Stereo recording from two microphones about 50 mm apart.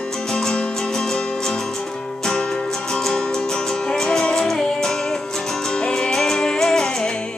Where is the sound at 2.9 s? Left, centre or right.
Centre.